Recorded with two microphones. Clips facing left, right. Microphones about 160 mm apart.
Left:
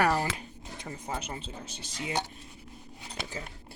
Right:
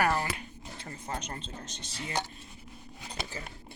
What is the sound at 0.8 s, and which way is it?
Speech, 10° left (ahead or behind).